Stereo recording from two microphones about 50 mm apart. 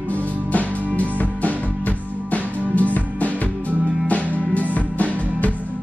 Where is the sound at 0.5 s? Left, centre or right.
Left.